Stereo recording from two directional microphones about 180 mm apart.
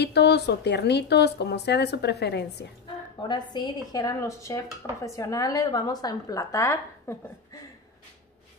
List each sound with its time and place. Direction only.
0.0 s speech: 65° left (ahead or behind)
3.2 s a woman's voice: 25° left (ahead or behind)